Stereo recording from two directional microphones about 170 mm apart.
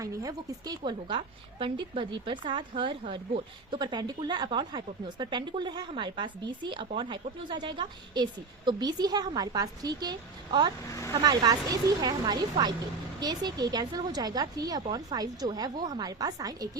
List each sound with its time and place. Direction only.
0.0 s a woman's voice: 20° right (ahead or behind)